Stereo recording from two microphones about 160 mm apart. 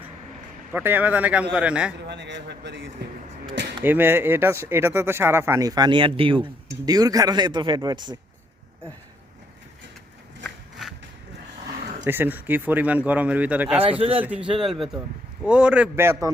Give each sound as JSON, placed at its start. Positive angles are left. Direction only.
{"t": 0.7, "sound": "speech", "side_deg": -10}
{"t": 2.0, "sound": "a man's voice", "side_deg": -90}
{"t": 3.8, "sound": "speech", "side_deg": -15}
{"t": 10.4, "sound": "a sound", "side_deg": 0}
{"t": 12.0, "sound": "speech", "side_deg": -15}